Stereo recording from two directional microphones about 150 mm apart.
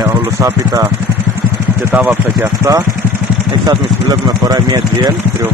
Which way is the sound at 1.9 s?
15° right (ahead or behind).